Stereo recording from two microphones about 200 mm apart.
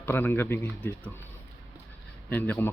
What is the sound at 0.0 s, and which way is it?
Speech, 10° left (ahead or behind).